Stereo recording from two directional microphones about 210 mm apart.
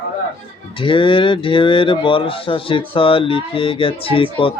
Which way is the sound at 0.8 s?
25° left (ahead or behind).